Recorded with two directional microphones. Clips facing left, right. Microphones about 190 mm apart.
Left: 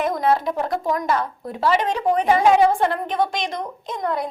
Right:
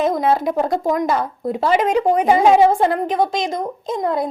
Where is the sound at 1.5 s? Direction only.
20° right (ahead or behind).